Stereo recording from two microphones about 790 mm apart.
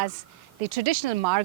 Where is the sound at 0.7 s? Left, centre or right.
Right.